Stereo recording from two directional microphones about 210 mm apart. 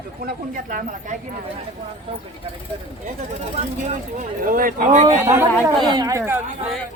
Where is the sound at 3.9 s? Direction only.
35° right (ahead or behind).